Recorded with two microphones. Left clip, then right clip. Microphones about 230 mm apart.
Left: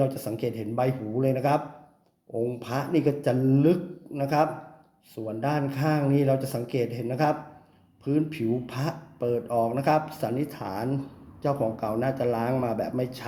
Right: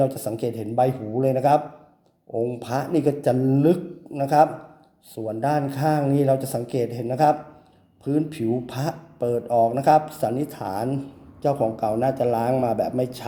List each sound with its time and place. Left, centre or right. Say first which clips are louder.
0.0 s speech: right 4 dB; centre